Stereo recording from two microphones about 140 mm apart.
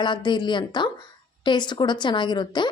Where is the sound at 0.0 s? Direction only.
35° left (ahead or behind).